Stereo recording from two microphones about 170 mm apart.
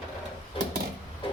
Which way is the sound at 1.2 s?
30° left (ahead or behind).